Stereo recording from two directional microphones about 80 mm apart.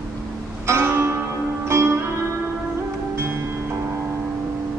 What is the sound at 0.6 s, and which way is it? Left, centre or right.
Music, right.